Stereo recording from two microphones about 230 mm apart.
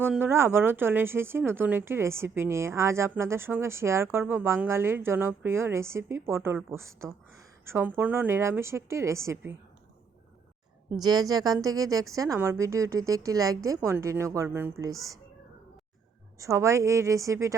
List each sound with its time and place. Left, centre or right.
0.0 s speech: centre
10.9 s speech: centre
16.4 s speech: centre